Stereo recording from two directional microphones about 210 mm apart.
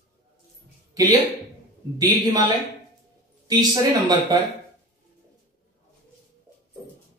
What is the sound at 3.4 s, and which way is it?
Speech, 20° right (ahead or behind).